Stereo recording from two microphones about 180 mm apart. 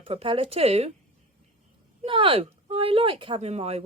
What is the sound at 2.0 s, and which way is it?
Speech, 30° right (ahead or behind).